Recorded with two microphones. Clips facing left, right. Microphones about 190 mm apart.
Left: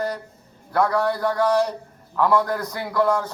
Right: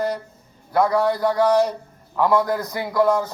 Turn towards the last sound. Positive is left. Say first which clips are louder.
# right 2 dB
turn(degrees=-15)  # may be behind; listen again after turning